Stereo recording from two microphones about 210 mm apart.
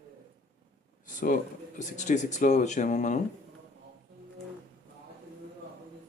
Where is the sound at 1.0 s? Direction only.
40° left (ahead or behind).